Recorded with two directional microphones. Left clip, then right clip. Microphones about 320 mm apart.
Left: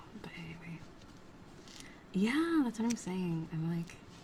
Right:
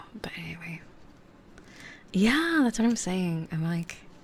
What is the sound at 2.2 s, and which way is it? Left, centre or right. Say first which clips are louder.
Speech: right 8 dB; right.